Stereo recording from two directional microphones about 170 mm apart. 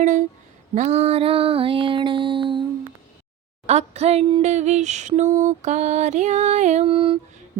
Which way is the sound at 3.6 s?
40° right (ahead or behind).